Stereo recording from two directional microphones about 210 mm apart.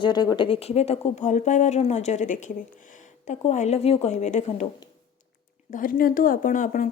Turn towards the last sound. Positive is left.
turn(degrees=40)  # may be behind; listen again after turning